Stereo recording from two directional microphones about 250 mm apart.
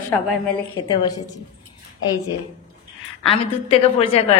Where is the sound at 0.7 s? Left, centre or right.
Centre.